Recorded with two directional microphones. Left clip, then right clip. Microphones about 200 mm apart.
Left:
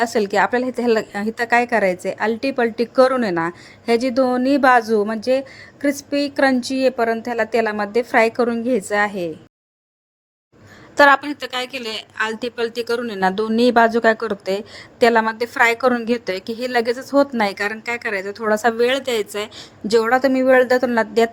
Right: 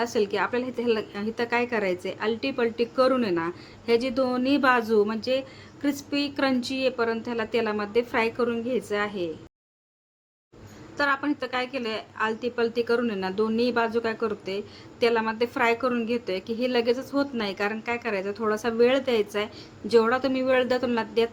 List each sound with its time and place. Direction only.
0.0 s speech: 35° left (ahead or behind)
10.9 s speech: 45° left (ahead or behind)